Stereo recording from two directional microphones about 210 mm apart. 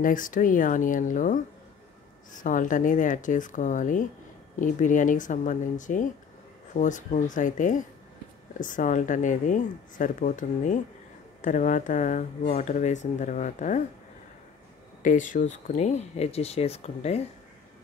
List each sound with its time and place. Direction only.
0.0 s speech: 40° left (ahead or behind)
15.0 s speech: 35° left (ahead or behind)